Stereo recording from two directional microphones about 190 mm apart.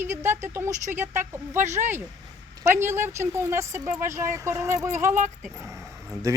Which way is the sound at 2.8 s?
10° right (ahead or behind).